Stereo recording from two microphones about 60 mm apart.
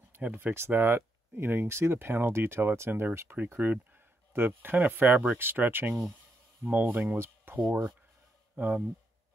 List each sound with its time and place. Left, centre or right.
0.1 s speech: right
0.6 s speech: right
2.9 s speech: right
7.2 s a sound: right
8.5 s speech: right